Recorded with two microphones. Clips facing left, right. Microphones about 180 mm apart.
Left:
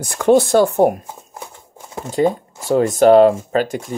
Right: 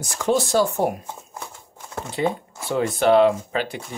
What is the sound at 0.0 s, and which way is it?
Speech, 60° left (ahead or behind).